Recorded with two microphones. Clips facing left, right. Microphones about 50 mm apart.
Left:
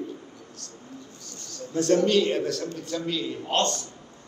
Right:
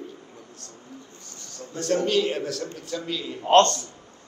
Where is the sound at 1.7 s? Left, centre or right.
Centre.